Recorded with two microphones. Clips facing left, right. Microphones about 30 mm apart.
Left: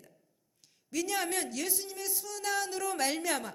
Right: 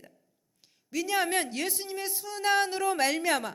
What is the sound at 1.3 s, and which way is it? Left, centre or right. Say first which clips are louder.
Speech: right 5 dB; right.